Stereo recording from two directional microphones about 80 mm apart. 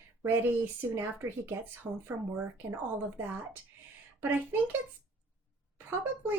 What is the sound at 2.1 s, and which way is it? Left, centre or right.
Speech, centre.